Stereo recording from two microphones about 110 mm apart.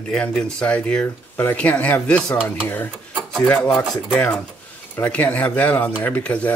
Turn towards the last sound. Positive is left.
turn(degrees=15)  # may be behind; listen again after turning